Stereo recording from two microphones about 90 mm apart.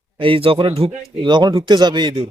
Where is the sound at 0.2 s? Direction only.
90° right.